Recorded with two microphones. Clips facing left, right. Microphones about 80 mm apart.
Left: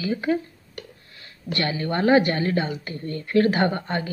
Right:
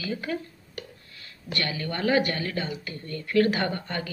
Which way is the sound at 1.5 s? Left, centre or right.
Left.